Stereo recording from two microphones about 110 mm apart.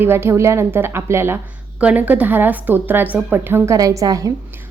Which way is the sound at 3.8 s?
30° right (ahead or behind).